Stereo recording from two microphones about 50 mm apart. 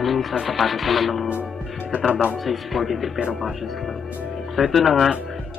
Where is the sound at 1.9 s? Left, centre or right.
Right.